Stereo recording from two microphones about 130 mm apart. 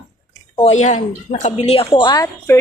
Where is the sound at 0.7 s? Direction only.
60° left (ahead or behind); by 2.5 s 25° left (ahead or behind).